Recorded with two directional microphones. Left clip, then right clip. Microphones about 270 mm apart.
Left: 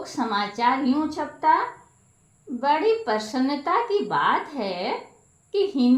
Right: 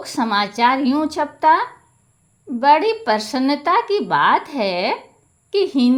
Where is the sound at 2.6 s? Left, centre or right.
Right.